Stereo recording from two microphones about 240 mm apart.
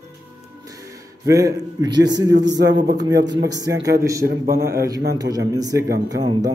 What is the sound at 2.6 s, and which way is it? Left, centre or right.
Speech, right.